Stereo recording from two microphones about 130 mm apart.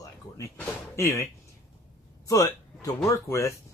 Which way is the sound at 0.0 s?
25° left (ahead or behind).